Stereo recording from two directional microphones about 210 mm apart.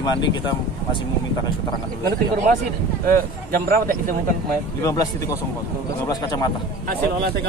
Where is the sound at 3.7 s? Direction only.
45° right (ahead or behind).